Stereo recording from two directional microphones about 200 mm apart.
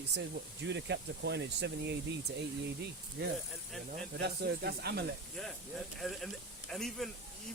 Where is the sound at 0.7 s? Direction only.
60° right (ahead or behind).